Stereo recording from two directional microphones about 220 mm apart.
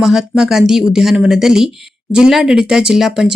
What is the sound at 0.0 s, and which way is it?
Speech, centre (ahead or behind).